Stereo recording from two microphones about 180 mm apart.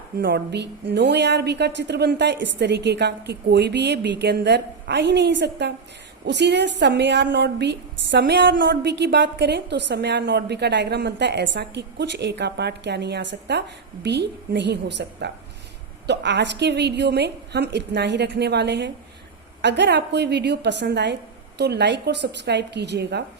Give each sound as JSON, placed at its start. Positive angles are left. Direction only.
{"t": 0.2, "sound": "a woman's voice", "side_deg": -60}